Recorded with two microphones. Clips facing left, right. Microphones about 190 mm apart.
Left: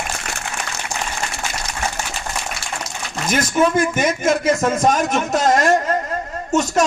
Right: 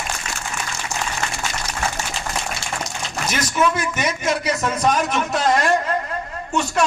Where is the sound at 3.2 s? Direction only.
50° left (ahead or behind).